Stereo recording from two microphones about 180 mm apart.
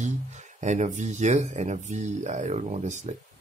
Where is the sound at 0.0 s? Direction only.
40° right (ahead or behind).